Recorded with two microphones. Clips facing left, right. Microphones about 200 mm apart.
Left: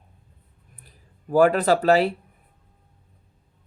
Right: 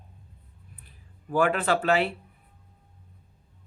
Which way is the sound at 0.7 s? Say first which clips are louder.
Left 1 dB; 40° left (ahead or behind).